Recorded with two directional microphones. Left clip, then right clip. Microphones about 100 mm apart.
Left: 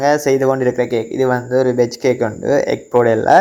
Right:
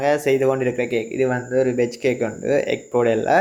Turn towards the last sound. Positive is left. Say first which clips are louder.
# left 6 dB
turn(degrees=55)  # may be behind; listen again after turning